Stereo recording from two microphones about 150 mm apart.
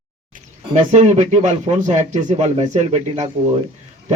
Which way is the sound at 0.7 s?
50° right (ahead or behind).